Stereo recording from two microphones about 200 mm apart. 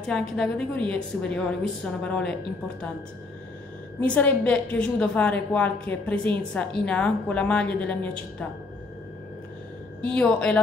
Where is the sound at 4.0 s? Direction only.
5° left (ahead or behind).